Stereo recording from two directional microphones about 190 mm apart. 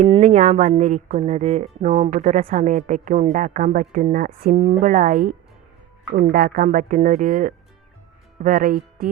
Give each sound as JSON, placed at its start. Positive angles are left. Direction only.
{"t": 0.0, "sound": "speech", "side_deg": -35}